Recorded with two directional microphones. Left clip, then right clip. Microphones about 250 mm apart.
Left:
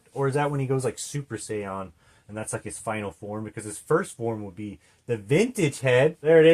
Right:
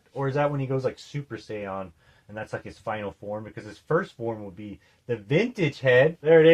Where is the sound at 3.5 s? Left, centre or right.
Left.